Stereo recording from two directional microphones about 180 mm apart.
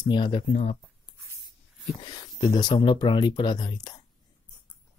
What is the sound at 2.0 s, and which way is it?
Speech, 25° left (ahead or behind).